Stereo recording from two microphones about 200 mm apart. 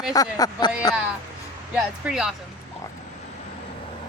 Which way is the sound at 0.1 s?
20° left (ahead or behind).